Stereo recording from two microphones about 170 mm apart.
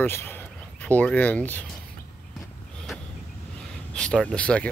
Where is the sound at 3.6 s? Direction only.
5° left (ahead or behind).